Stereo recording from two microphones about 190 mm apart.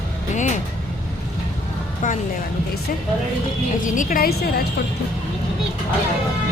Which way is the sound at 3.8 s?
45° left (ahead or behind).